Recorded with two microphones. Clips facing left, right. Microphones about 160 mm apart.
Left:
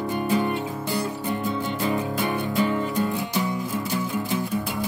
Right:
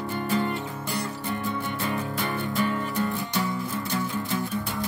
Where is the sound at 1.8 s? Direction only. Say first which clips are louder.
Left 5 dB; 20° left (ahead or behind).